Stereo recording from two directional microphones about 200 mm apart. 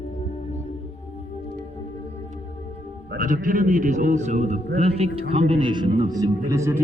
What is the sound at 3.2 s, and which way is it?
A man's voice, 40° right (ahead or behind).